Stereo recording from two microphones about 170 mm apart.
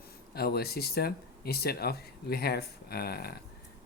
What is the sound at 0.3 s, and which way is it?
Speech, 65° left (ahead or behind).